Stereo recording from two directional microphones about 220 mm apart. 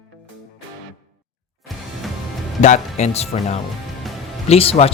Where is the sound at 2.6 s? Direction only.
35° left (ahead or behind).